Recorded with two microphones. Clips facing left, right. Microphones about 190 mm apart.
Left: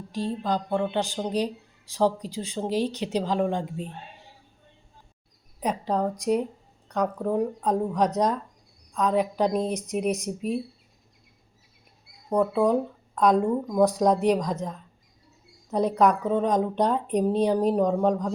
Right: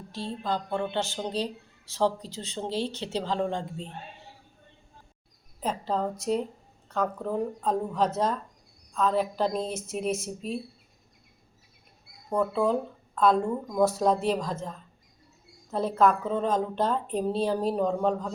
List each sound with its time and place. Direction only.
0.1 s speech: 15° left (ahead or behind)
5.5 s speech: 15° left (ahead or behind)
12.3 s speech: 15° left (ahead or behind)